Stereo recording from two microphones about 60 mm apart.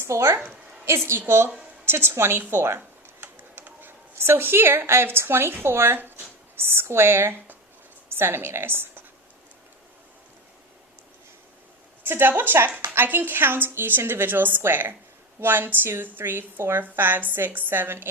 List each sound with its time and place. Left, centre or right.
0.0 s a woman's voice: right
12.0 s a woman's voice: right